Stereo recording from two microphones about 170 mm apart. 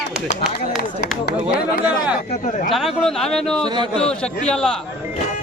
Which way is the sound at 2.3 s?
45° left (ahead or behind).